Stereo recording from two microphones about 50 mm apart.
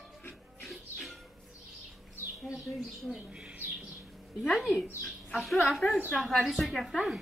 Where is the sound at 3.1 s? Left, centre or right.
Right.